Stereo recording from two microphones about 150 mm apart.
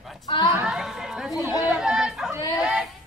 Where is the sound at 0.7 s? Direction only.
5° right (ahead or behind).